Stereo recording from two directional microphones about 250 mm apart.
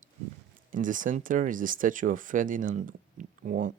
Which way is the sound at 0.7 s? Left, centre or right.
Right.